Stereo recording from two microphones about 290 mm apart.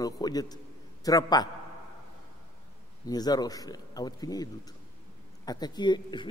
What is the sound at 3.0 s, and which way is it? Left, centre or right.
A man's voice, centre.